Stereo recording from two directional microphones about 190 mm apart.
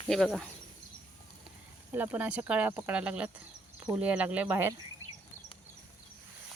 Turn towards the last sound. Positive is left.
turn(degrees=-10)  # may be behind; listen again after turning